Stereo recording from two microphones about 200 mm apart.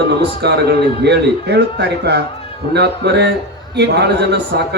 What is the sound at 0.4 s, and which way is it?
A man's voice, 55° right (ahead or behind).